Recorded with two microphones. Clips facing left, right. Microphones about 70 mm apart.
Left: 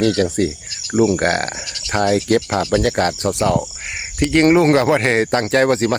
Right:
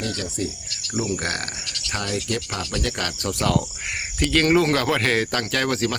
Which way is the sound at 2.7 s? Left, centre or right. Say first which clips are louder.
Left 10 dB; left.